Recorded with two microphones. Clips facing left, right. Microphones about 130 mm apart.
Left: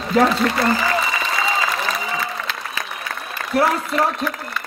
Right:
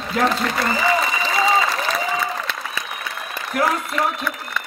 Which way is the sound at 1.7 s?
Centre (ahead or behind).